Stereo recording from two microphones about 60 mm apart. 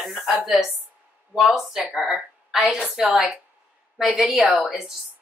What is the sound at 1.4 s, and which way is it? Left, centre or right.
Speech, centre.